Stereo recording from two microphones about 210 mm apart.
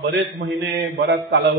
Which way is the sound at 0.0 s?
55° right (ahead or behind).